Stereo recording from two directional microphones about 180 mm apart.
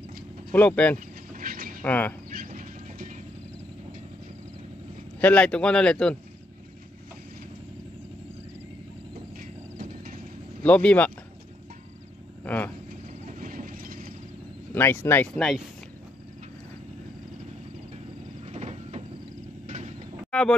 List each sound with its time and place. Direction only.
0.5 s speech: 10° left (ahead or behind)
0.9 s vehicle: 50° right (ahead or behind)
1.8 s speech: 10° left (ahead or behind)
2.3 s a sound: 45° right (ahead or behind)
5.2 s speech: 5° left (ahead or behind)
9.4 s clip-clop: 50° right (ahead or behind)
10.6 s speech: 5° left (ahead or behind)
12.4 s speech: 10° left (ahead or behind)
13.3 s vehicle: 45° right (ahead or behind)
14.7 s speech: 10° left (ahead or behind)
18.4 s vehicle: 35° right (ahead or behind)
20.2 s vehicle: 5° left (ahead or behind)